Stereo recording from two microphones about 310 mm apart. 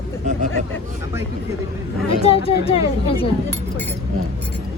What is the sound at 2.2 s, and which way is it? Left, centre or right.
Speech, centre.